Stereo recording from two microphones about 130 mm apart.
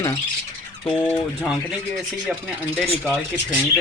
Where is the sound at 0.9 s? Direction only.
10° left (ahead or behind).